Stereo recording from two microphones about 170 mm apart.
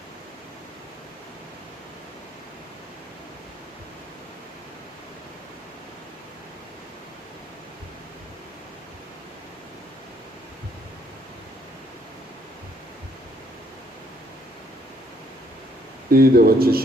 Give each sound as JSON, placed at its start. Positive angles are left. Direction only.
{"t": 16.0, "sound": "speech", "side_deg": -60}